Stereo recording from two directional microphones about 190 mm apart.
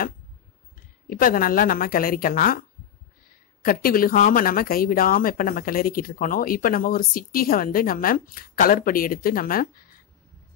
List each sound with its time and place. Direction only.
1.0 s speech: 50° left (ahead or behind)
3.6 s speech: 50° left (ahead or behind)